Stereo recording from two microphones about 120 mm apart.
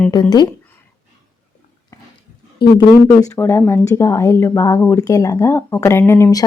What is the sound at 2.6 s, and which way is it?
Speech, 40° left (ahead or behind).